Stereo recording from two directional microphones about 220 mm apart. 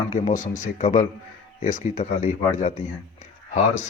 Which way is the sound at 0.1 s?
35° left (ahead or behind).